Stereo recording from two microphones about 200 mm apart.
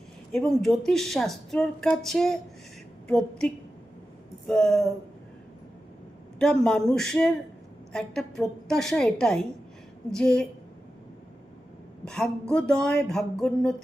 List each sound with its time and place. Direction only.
0.3 s speech: centre (ahead or behind)
6.4 s speech: 5° left (ahead or behind)
12.0 s speech: 5° left (ahead or behind)